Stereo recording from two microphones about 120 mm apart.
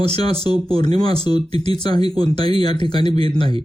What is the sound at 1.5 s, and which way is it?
Speech, 55° right (ahead or behind).